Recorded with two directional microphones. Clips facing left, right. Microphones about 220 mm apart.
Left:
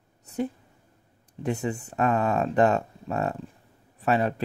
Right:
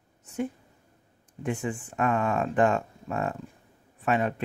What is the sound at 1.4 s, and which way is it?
Speech, 40° left (ahead or behind).